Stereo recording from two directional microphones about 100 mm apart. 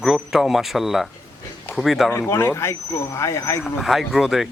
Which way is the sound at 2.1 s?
25° left (ahead or behind).